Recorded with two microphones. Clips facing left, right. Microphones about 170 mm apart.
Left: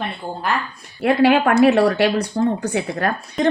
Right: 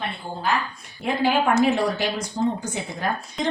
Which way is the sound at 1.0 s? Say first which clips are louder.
Left 7 dB; 70° left (ahead or behind).